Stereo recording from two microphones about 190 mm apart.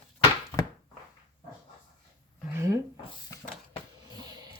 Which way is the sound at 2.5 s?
15° right (ahead or behind).